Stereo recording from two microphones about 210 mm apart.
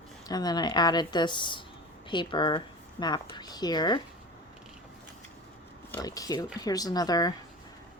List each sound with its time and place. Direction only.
0.3 s speech: 20° left (ahead or behind)
5.9 s speech: 15° left (ahead or behind)